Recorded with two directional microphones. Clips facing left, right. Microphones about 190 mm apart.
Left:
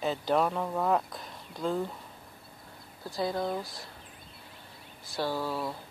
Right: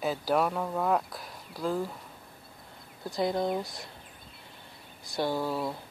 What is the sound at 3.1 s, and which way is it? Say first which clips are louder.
Speech: right 2 dB; 20° right (ahead or behind).